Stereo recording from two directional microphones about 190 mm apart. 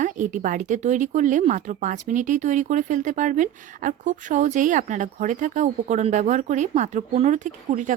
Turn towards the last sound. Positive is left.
turn(degrees=-40)  # may be behind; listen again after turning